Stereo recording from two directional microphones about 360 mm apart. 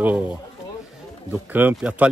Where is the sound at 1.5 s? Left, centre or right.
Centre.